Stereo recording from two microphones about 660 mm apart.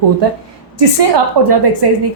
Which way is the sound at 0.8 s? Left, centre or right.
Right.